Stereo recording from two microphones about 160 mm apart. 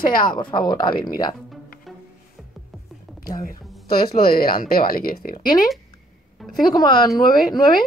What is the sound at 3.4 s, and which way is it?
Speech, 70° left (ahead or behind).